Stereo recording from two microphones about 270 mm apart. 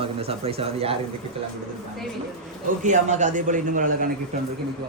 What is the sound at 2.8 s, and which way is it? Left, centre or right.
Speech, right.